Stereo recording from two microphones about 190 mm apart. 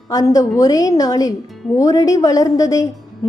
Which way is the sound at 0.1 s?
20° left (ahead or behind).